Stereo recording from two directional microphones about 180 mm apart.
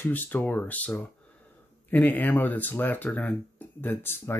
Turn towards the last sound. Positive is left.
turn(degrees=10)  # may be behind; listen again after turning